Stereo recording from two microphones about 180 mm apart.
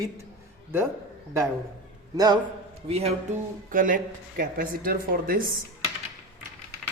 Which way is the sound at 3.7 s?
50° right (ahead or behind).